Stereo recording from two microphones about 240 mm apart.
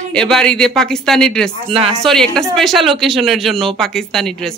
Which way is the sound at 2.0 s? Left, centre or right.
Centre.